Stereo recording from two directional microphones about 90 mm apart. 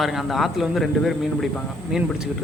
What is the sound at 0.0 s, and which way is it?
Speech, centre (ahead or behind).